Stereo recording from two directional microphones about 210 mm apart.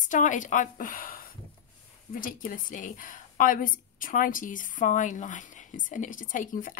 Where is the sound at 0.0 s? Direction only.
40° left (ahead or behind).